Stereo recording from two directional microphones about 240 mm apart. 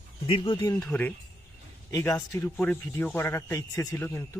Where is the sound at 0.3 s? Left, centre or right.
Left.